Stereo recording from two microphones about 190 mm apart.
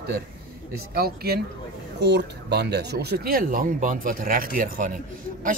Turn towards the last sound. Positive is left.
turn(degrees=-45)  # may be behind; listen again after turning